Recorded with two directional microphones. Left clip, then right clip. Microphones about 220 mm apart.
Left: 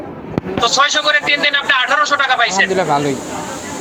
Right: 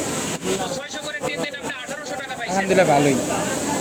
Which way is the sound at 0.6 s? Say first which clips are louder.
Left 16 dB; 5° left (ahead or behind).